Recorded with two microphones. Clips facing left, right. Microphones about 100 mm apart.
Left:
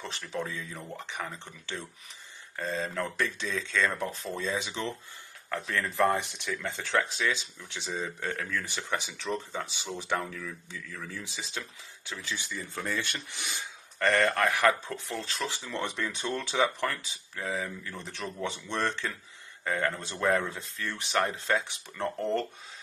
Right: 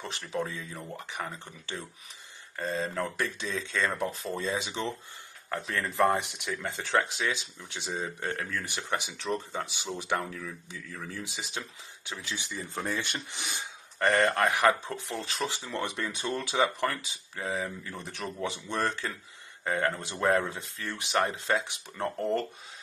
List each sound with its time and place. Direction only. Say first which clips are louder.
0.3 s speech: right 2 dB; 15° right (ahead or behind)
0.8 s speech: right 2 dB; 5° right (ahead or behind)
2.5 s speech: right 1 dB; 15° right (ahead or behind)